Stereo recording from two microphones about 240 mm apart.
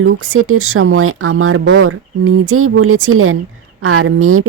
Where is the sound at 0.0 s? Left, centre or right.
Right.